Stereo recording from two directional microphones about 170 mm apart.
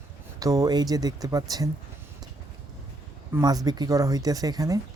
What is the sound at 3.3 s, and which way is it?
Speech, 20° right (ahead or behind).